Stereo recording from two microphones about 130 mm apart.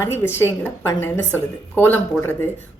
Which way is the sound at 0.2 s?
20° left (ahead or behind).